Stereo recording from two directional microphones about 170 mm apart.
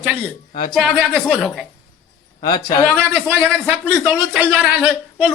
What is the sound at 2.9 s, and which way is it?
A man's voice, 10° right (ahead or behind).